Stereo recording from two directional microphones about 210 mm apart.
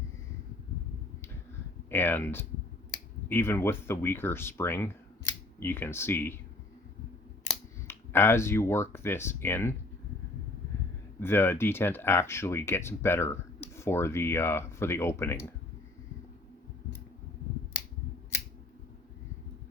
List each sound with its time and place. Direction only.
1.9 s speech: 10° left (ahead or behind)
7.9 s speech: 10° left (ahead or behind)
11.2 s speech: 10° left (ahead or behind)